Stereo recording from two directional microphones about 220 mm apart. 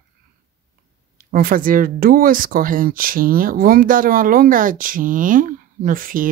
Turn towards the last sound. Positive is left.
turn(degrees=-40)  # may be behind; listen again after turning